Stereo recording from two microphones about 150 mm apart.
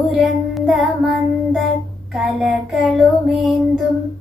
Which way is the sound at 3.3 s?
35° right (ahead or behind).